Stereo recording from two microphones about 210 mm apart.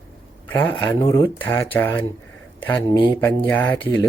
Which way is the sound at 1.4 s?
10° left (ahead or behind).